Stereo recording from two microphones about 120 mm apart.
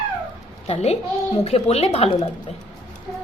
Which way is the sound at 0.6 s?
60° left (ahead or behind).